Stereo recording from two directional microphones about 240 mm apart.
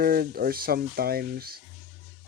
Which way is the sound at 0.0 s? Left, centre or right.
Right.